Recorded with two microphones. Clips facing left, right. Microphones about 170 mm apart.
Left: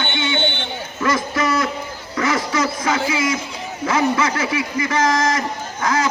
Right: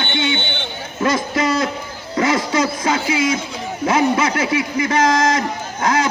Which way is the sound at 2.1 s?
25° right (ahead or behind).